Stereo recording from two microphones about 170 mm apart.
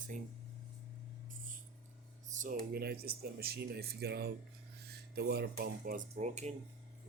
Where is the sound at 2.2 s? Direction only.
50° right (ahead or behind).